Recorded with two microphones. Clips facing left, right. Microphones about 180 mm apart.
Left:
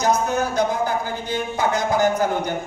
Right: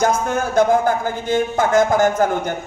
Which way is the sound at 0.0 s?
50° right (ahead or behind).